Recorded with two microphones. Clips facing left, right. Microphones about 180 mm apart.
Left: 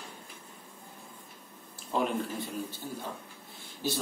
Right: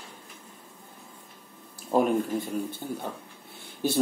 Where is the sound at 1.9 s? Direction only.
45° right (ahead or behind).